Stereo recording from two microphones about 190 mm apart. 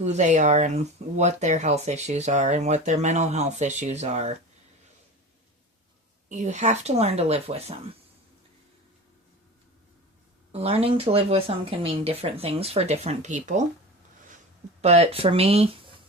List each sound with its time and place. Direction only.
0.0 s speech: 35° right (ahead or behind)
6.2 s speech: 40° right (ahead or behind)
10.5 s speech: 30° right (ahead or behind)
14.8 s speech: 35° right (ahead or behind)